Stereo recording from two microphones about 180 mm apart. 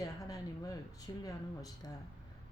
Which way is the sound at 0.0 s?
20° left (ahead or behind).